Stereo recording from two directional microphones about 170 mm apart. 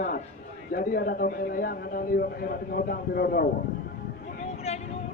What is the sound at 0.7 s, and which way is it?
A man's voice, 55° left (ahead or behind).